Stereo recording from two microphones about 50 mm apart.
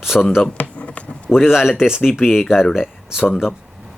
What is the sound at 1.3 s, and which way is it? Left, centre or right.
Speech, centre.